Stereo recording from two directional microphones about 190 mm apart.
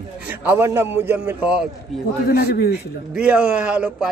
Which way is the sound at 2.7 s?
5° right (ahead or behind).